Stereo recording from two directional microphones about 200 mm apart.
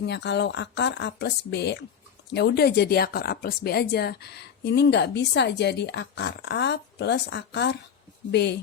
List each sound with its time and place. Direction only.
0.0 s speech: 60° left (ahead or behind)